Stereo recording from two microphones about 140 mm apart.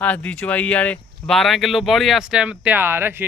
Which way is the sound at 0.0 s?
10° left (ahead or behind).